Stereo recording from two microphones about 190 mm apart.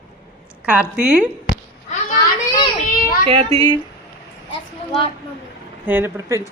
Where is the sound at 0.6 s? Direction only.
5° right (ahead or behind).